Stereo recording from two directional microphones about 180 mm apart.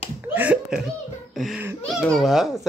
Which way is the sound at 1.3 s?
Centre (ahead or behind).